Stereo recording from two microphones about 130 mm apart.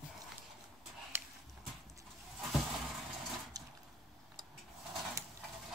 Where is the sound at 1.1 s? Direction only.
20° right (ahead or behind).